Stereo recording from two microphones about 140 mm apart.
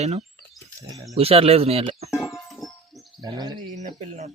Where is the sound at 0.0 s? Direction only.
50° right (ahead or behind).